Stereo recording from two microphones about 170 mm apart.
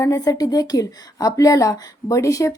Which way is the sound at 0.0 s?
20° left (ahead or behind).